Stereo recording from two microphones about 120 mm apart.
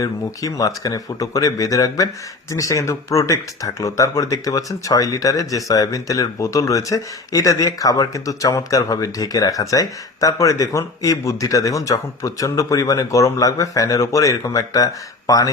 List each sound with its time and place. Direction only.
0.0 s speech: 30° left (ahead or behind)